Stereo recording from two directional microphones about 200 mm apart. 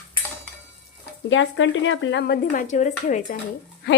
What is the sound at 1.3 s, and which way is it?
Speech, 65° left (ahead or behind).